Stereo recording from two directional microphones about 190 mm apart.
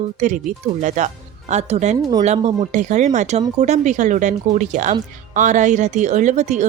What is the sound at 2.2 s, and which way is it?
Speech, 35° right (ahead or behind).